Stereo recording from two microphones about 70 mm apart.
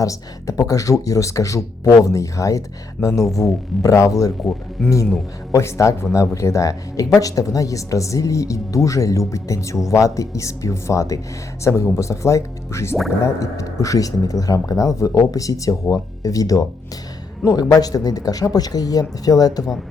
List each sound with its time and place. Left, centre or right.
0.0 s speech: left
4.8 s speech: centre
5.5 s speech: left